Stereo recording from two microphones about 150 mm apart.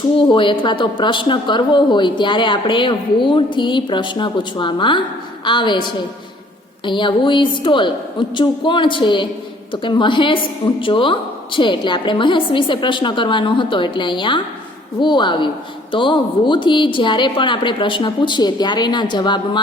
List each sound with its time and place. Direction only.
0.3 s a woman's voice: 35° left (ahead or behind)
6.8 s a woman's voice: 30° left (ahead or behind)